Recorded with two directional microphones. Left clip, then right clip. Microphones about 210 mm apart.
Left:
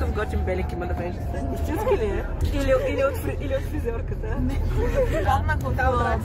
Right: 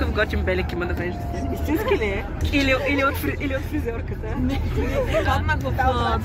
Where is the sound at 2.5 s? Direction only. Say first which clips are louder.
Right 2 dB; 10° right (ahead or behind).